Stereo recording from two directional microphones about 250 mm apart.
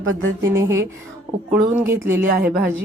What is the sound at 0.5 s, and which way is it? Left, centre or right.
A woman's voice, centre.